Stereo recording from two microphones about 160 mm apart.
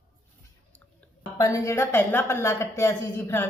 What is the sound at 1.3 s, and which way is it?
A woman's voice, 20° left (ahead or behind).